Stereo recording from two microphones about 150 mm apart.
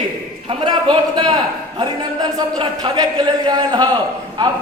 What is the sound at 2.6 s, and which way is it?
A man's voice, 30° right (ahead or behind).